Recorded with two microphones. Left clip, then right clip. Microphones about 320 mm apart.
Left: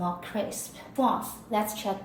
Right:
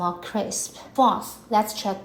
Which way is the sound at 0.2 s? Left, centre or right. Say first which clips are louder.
Right 4 dB; centre.